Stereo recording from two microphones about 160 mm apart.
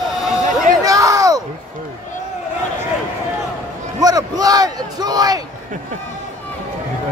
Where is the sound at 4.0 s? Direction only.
25° right (ahead or behind).